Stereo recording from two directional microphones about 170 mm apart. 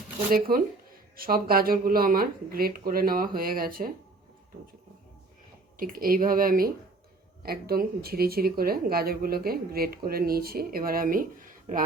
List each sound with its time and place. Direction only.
0.3 s speech: 55° right (ahead or behind)
5.7 s speech: 60° right (ahead or behind)